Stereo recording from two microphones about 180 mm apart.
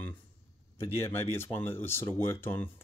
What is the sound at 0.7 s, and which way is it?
Speech, 15° left (ahead or behind).